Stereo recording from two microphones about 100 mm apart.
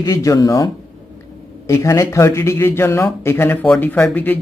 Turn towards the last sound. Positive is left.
turn(degrees=20)  # may be behind; listen again after turning